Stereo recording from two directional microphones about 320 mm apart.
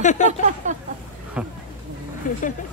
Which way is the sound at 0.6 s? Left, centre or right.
Right.